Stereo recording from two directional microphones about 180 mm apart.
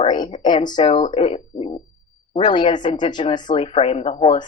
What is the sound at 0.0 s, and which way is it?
A woman's voice, 30° left (ahead or behind).